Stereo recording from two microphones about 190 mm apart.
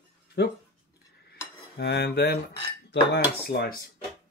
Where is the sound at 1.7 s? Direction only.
60° left (ahead or behind).